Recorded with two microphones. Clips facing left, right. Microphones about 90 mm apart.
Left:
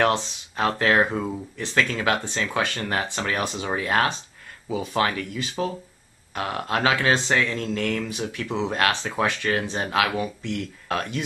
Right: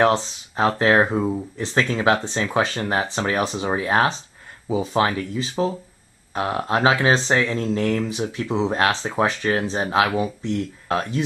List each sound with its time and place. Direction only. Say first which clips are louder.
0.0 s speech: right 3 dB; 20° right (ahead or behind)
2.8 s speech: right 4 dB; 20° right (ahead or behind)